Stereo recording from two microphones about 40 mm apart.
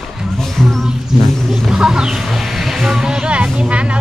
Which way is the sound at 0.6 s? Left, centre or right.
Centre.